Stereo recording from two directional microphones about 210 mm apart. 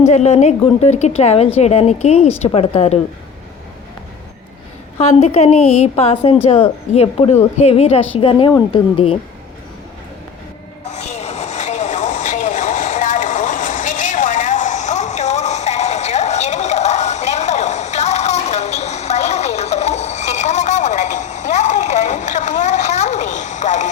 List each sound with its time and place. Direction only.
0.0 s a woman's voice: 35° left (ahead or behind)
4.9 s a woman's voice: 30° left (ahead or behind)
10.9 s a sound: 30° left (ahead or behind)